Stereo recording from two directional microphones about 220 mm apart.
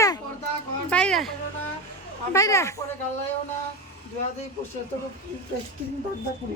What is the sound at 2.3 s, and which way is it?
Speech, 15° left (ahead or behind).